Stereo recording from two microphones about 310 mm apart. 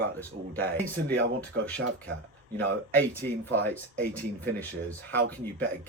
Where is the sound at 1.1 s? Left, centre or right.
Right.